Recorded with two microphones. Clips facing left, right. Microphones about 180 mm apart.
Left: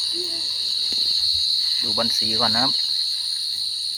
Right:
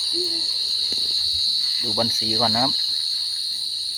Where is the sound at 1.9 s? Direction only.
25° right (ahead or behind).